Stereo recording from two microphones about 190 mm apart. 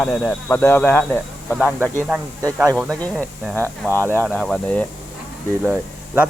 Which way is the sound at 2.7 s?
5° left (ahead or behind).